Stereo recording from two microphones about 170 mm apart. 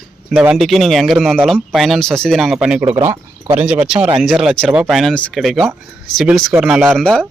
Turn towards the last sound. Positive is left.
turn(degrees=5)  # may be behind; listen again after turning